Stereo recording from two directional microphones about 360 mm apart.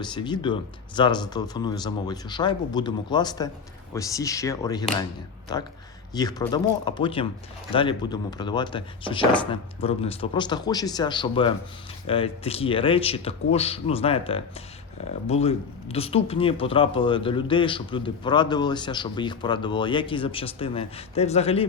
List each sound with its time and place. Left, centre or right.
0.0 s speech: centre
6.1 s speech: centre